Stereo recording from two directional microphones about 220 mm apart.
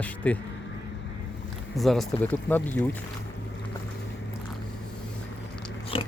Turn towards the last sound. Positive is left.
turn(degrees=25)  # may be behind; listen again after turning